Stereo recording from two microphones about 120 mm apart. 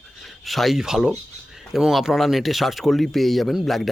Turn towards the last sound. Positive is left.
turn(degrees=0)  # may be behind; listen again after turning